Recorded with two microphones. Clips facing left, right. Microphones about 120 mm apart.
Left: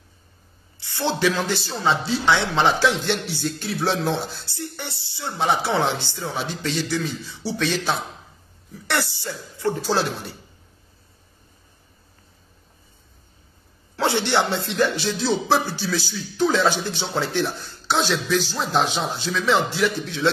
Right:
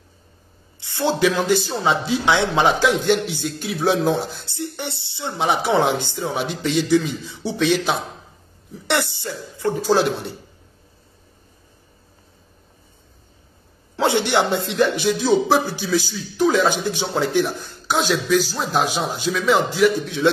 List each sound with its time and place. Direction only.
0.7 s a man's voice: 20° right (ahead or behind)
2.9 s a man's voice: centre (ahead or behind)
4.5 s a man's voice: 20° right (ahead or behind)
13.9 s a woman's voice: 20° right (ahead or behind)